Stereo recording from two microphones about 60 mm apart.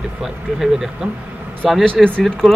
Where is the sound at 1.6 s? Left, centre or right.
Centre.